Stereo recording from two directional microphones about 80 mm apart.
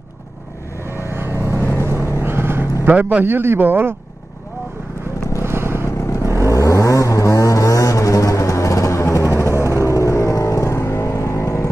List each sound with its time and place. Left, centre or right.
0.9 s vehicle: right
2.9 s a man's voice: centre
5.4 s vehicle: right
6.5 s vehicle: left